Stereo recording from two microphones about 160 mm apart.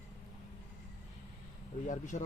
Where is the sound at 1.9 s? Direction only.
50° left (ahead or behind).